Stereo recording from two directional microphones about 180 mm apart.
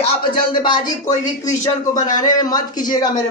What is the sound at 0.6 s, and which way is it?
Speech, 25° left (ahead or behind).